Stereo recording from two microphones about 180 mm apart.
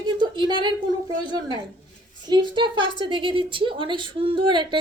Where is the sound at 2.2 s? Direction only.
25° right (ahead or behind).